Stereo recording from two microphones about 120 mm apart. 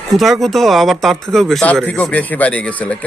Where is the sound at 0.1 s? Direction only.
Centre (ahead or behind).